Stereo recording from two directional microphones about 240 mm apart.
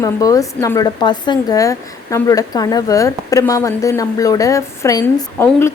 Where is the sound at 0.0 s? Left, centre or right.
Centre.